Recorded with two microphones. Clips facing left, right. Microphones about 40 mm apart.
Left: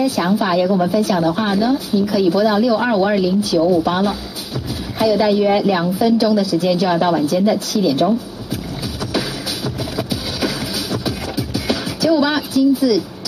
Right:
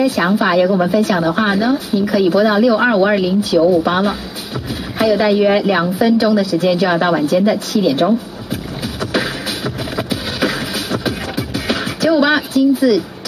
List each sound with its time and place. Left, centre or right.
0.0 s a woman's voice: right
9.9 s music: right